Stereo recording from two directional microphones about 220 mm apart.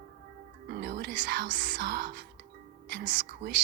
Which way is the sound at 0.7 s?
50° right (ahead or behind).